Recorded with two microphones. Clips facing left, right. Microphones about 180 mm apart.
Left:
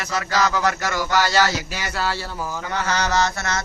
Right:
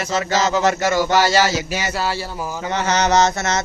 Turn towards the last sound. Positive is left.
turn(degrees=-20)  # may be behind; listen again after turning